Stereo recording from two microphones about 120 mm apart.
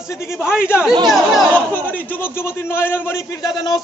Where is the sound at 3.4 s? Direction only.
35° left (ahead or behind).